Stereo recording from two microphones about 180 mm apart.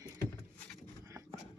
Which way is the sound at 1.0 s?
15° right (ahead or behind).